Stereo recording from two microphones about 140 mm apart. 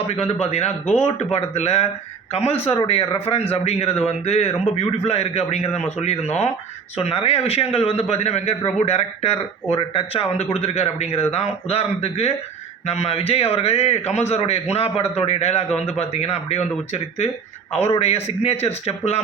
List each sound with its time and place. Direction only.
0.2 s a man's voice: 50° left (ahead or behind)